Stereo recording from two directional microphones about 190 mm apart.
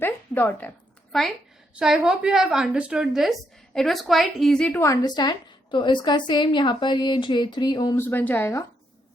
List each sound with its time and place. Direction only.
0.0 s a woman's voice: 10° left (ahead or behind)
8.0 s speech: 10° left (ahead or behind)